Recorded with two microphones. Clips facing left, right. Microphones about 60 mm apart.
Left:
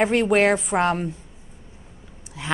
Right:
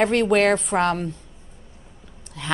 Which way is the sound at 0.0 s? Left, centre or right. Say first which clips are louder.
Even; centre.